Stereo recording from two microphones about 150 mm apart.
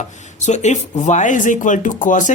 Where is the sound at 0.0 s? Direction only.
50° left (ahead or behind).